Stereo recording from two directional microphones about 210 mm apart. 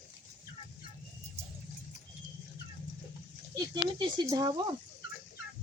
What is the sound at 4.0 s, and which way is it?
Speech, 20° right (ahead or behind).